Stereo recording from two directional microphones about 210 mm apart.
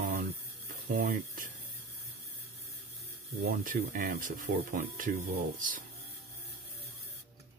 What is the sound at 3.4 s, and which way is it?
Speech, 45° right (ahead or behind).